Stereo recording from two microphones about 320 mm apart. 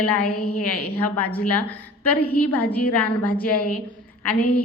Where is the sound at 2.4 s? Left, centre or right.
Centre.